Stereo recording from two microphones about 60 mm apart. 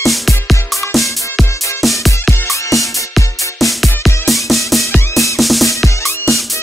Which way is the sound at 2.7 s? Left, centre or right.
Centre.